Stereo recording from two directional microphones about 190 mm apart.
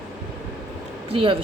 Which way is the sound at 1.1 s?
25° right (ahead or behind).